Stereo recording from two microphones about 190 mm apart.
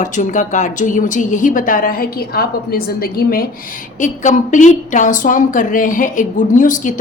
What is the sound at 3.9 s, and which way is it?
Speech, 40° left (ahead or behind).